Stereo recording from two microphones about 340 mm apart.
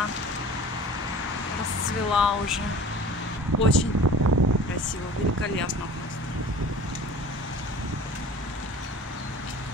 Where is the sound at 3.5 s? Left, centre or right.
Right.